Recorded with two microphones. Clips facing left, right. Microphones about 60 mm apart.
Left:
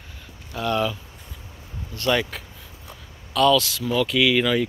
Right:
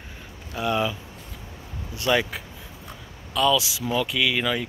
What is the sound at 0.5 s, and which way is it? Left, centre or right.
Speech, centre.